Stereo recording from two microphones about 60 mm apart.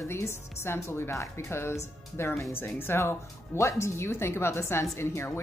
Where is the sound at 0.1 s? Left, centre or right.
Left.